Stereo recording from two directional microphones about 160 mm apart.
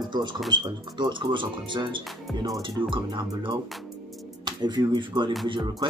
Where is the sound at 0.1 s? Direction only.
30° right (ahead or behind).